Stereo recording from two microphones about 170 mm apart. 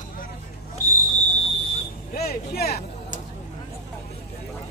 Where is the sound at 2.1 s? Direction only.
65° left (ahead or behind).